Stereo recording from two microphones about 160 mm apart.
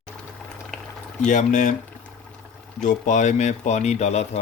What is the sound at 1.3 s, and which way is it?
Speech, 50° left (ahead or behind).